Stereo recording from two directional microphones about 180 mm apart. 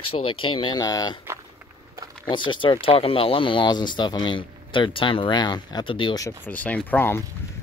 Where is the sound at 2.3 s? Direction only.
25° left (ahead or behind).